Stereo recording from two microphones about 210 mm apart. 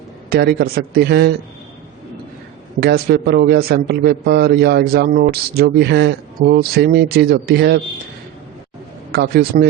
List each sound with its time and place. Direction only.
0.3 s speech: 45° right (ahead or behind)
2.8 s speech: 50° right (ahead or behind)
9.1 s speech: 50° right (ahead or behind)